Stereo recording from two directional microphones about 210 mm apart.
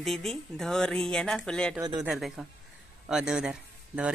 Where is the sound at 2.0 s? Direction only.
Centre (ahead or behind).